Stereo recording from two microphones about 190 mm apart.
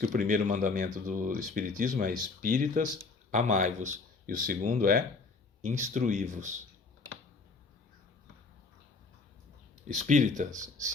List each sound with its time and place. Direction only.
0.0 s speech: 45° right (ahead or behind)
9.9 s speech: 40° right (ahead or behind)